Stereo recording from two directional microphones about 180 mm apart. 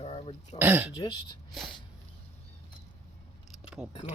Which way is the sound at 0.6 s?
10° right (ahead or behind).